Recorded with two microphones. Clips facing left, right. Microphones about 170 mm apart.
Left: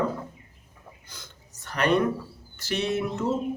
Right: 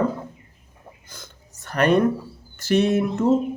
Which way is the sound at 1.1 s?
50° right (ahead or behind).